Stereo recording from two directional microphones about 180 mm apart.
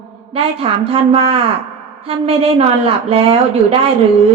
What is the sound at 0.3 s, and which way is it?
A woman's voice, 30° right (ahead or behind).